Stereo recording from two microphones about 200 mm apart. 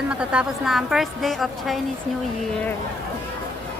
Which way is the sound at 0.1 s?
5° right (ahead or behind).